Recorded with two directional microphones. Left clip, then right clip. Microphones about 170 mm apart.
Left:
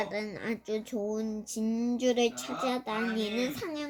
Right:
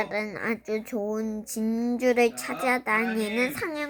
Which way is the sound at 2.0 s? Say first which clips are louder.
Right 6 dB; 15° left (ahead or behind).